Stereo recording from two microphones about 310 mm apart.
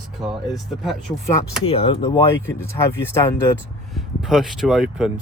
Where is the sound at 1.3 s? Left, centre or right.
Centre.